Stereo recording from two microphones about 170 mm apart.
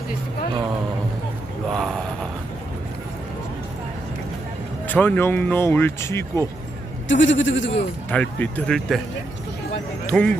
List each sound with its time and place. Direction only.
1.7 s a sound: centre (ahead or behind)
4.9 s speech: 10° left (ahead or behind)
7.1 s speech: 90° left
8.1 s speech: 10° left (ahead or behind)
10.1 s speech: 5° left (ahead or behind)